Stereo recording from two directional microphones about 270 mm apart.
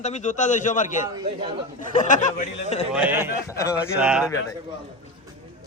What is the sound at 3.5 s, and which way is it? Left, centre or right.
Speech, centre.